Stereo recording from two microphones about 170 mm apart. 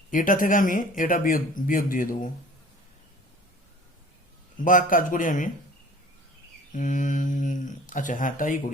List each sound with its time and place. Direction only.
0.1 s speech: 50° left (ahead or behind)
4.6 s speech: 50° left (ahead or behind)
6.7 s speech: 50° left (ahead or behind)